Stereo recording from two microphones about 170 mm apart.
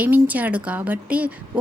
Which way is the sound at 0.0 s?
10° right (ahead or behind).